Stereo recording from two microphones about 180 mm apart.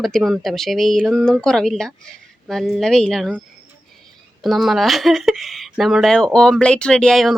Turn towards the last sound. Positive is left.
turn(degrees=0)  # may be behind; listen again after turning